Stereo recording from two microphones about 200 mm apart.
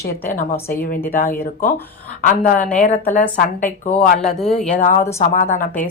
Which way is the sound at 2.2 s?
40° left (ahead or behind).